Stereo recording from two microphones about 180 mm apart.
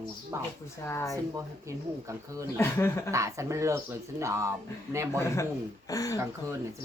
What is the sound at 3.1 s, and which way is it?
Speech, 15° right (ahead or behind).